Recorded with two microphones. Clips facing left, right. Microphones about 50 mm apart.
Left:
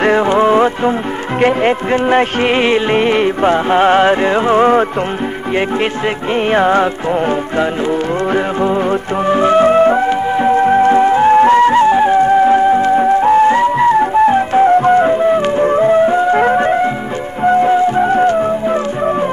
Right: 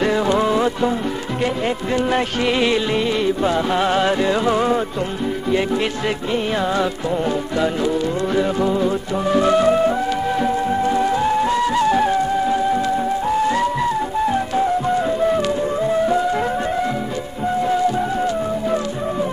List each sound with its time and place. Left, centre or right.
0.0 s music: left
6.5 s music: left
9.3 s music: left
10.0 s music: left
10.5 s music: left
12.2 s music: left
15.2 s music: left
15.6 s music: left